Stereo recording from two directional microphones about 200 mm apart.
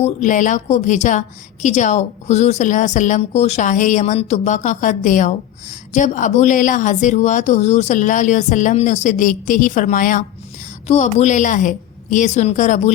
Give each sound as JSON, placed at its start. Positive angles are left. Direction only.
{"t": 0.0, "sound": "speech", "side_deg": 40}